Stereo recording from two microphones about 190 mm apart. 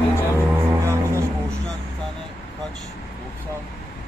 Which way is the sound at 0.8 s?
15° right (ahead or behind).